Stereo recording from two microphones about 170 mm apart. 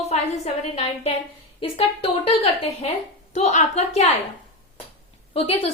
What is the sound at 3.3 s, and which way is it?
Speech, 40° left (ahead or behind).